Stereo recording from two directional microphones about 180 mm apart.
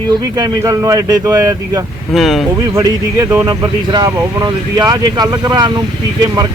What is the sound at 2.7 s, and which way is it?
Speech, 15° right (ahead or behind).